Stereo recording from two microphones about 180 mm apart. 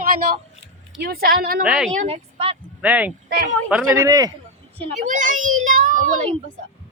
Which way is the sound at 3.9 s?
20° right (ahead or behind).